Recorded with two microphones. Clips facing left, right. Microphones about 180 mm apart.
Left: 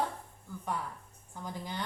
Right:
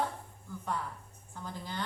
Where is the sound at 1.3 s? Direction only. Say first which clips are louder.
Left 1 dB; 15° left (ahead or behind).